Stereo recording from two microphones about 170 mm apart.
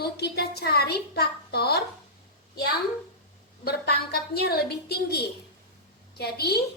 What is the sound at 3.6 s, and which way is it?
A woman's voice, 70° left (ahead or behind).